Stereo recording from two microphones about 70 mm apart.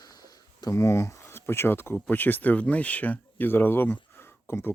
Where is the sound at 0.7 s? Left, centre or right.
Left.